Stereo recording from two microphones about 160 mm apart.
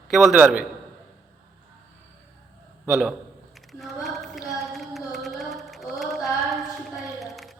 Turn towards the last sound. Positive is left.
turn(degrees=0)  # may be behind; listen again after turning